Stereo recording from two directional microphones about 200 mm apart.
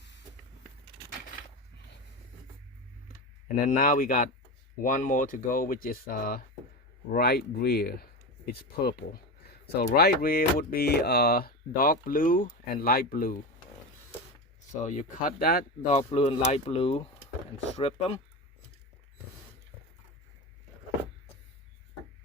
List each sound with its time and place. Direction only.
3.7 s speech: 45° left (ahead or behind)
14.8 s speech: 45° left (ahead or behind)
15.9 s speech: 30° left (ahead or behind)